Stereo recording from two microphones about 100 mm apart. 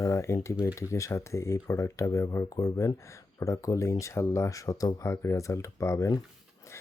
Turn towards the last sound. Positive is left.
turn(degrees=30)  # may be behind; listen again after turning